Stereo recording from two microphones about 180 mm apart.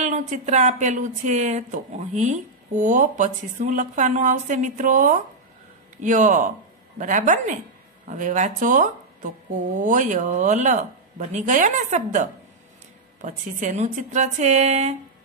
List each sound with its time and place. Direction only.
0.0 s speech: 40° right (ahead or behind)